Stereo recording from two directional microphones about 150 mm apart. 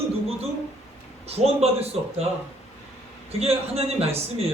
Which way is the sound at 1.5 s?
45° right (ahead or behind).